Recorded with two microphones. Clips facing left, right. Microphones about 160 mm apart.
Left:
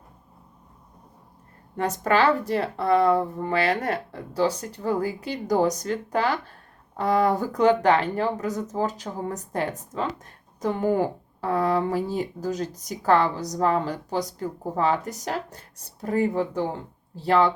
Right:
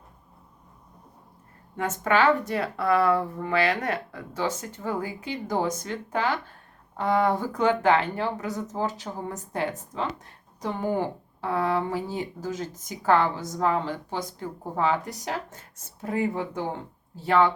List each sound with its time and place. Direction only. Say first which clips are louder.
1.7 s speech: left 2 dB; 35° left (ahead or behind)